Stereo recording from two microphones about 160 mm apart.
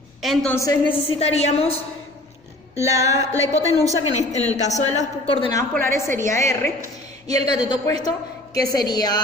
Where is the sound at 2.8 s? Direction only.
20° right (ahead or behind).